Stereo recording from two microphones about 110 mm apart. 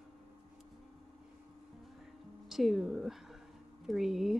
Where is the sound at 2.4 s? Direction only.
Centre (ahead or behind).